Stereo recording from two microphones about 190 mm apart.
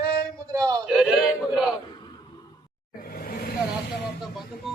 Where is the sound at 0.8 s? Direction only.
Centre (ahead or behind).